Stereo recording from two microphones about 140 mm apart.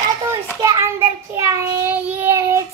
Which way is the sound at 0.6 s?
20° right (ahead or behind).